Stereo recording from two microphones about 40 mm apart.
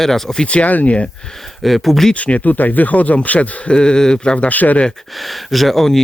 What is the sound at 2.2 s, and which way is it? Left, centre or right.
Speech, left.